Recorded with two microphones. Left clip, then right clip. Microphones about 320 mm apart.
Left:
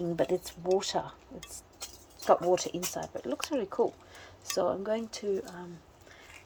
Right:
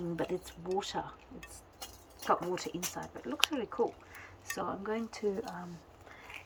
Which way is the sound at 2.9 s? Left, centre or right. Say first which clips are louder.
Left 6 dB; centre.